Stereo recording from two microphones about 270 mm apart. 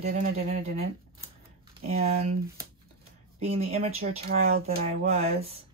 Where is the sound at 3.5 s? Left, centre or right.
Right.